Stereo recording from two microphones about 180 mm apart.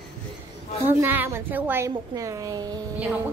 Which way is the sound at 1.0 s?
10° right (ahead or behind).